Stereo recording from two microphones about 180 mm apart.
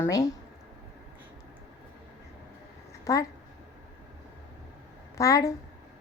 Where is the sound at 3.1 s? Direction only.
15° left (ahead or behind).